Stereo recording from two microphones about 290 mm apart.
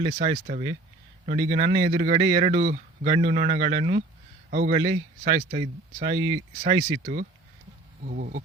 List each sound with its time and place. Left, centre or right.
0.0 s a man's voice: right
8.0 s insect: right